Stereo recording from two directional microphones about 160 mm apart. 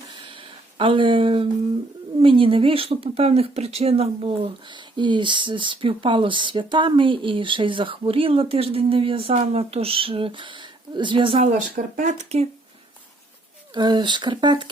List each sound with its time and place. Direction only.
0.1 s a sound: 30° right (ahead or behind)
2.1 s speech: 35° right (ahead or behind)
11.7 s speech: 55° right (ahead or behind)
13.7 s speech: 30° right (ahead or behind)